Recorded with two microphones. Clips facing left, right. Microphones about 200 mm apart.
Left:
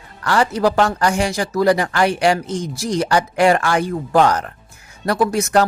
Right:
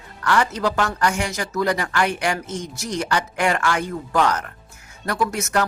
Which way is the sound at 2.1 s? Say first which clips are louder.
Left 7 dB; 15° left (ahead or behind).